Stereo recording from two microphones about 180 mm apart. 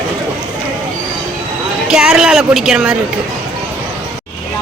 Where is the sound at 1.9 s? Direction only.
5° right (ahead or behind).